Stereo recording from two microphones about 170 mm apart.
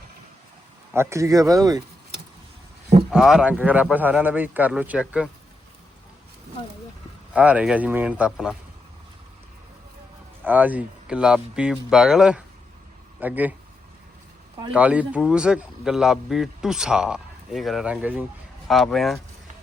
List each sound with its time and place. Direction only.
0.9 s speech: 20° right (ahead or behind)
3.1 s speech: 5° right (ahead or behind)
7.3 s speech: 10° right (ahead or behind)
10.4 s a man's voice: 10° right (ahead or behind)
14.7 s a man's voice: 10° right (ahead or behind)